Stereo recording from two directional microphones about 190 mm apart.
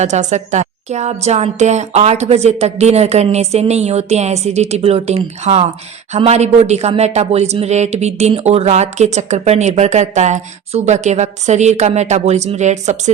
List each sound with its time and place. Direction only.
0.0 s speech: 40° right (ahead or behind)